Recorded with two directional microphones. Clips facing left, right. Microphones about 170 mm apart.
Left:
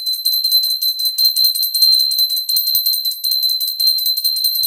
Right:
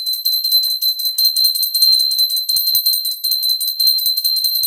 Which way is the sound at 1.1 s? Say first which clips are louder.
Left 1 dB; 15° left (ahead or behind).